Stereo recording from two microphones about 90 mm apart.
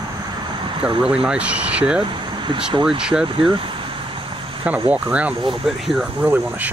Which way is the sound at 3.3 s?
70° right (ahead or behind).